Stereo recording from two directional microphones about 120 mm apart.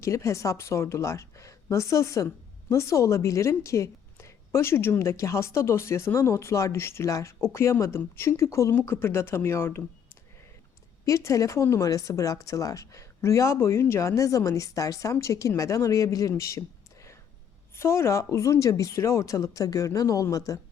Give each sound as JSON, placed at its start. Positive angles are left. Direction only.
{"t": 0.0, "sound": "a woman's voice", "side_deg": 25}
{"t": 11.0, "sound": "a woman's voice", "side_deg": 25}